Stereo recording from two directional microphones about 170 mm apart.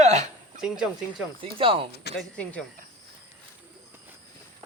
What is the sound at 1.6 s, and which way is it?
Speech, 30° right (ahead or behind).